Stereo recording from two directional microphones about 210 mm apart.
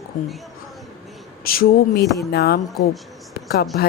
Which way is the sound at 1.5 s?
45° left (ahead or behind).